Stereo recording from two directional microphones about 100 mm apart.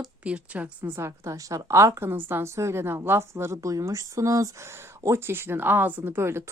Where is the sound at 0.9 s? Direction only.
30° right (ahead or behind).